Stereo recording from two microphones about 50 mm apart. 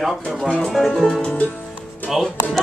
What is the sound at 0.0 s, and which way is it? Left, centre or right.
Speech, centre.